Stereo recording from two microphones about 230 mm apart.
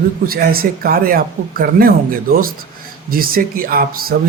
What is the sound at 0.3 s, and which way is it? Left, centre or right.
Speech, right.